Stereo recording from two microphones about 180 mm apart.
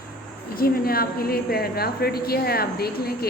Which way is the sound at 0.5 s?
55° left (ahead or behind).